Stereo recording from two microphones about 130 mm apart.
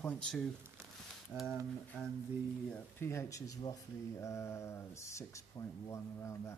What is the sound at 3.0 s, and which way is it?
Mantra, 20° left (ahead or behind).